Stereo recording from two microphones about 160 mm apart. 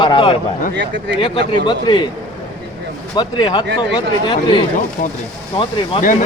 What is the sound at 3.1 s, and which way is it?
Speech, 25° left (ahead or behind).